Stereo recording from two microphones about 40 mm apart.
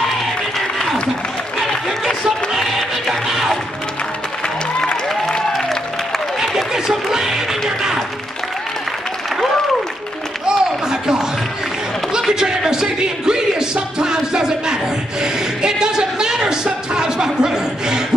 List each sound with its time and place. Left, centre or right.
2.2 s music: centre
6.4 s music: centre
10.4 s a sound: centre